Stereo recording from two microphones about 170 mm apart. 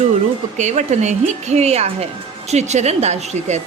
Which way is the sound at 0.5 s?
45° right (ahead or behind).